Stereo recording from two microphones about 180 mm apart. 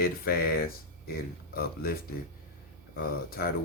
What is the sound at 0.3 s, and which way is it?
Speech, 55° left (ahead or behind).